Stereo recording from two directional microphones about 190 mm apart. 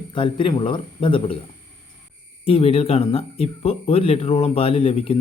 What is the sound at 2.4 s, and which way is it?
Speech, 30° left (ahead or behind).